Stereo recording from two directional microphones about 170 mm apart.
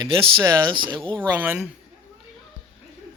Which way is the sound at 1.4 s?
10° right (ahead or behind).